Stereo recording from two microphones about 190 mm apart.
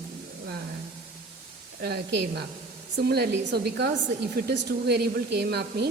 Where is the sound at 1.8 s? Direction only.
60° right (ahead or behind).